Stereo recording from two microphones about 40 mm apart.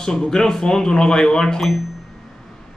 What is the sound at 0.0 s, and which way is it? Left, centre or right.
A man's voice, centre.